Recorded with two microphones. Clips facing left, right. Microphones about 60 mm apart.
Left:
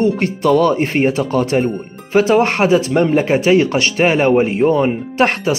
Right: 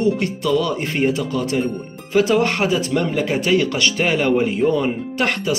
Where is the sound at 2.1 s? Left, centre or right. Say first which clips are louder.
Left 4 dB; left.